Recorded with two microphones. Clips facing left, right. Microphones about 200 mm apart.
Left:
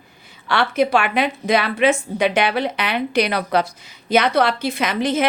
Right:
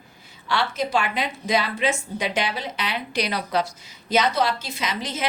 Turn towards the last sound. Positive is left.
turn(degrees=55)  # may be behind; listen again after turning